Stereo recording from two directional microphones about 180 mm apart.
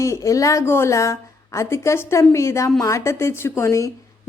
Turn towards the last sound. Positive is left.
turn(degrees=15)  # may be behind; listen again after turning